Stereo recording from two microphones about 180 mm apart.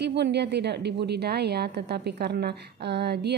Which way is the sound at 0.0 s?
70° right (ahead or behind).